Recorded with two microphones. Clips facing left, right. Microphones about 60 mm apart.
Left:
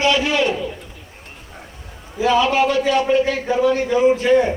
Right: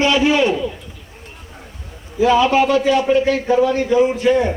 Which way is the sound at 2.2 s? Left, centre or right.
Centre.